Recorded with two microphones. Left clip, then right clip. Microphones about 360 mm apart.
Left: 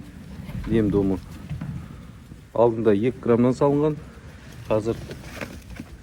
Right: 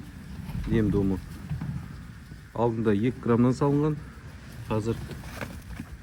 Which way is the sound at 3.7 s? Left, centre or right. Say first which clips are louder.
Left 5 dB; left.